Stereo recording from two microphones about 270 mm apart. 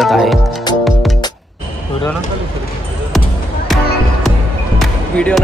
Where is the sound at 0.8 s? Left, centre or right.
Centre.